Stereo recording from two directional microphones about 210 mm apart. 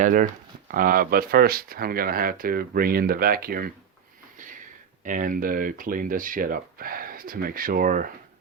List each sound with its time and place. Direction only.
0.0 s speech: 40° right (ahead or behind)
5.0 s speech: 40° right (ahead or behind)